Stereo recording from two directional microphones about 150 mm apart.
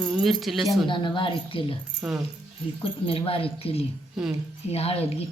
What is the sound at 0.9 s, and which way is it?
Speech, 35° left (ahead or behind).